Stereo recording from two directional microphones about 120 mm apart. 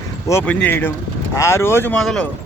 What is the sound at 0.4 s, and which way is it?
Speech, 10° left (ahead or behind).